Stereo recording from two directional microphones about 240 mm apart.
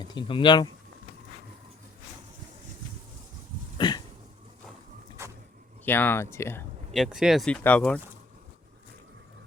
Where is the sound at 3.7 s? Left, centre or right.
Centre.